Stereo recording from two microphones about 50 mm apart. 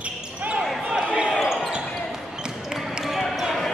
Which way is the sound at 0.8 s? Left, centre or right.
Centre.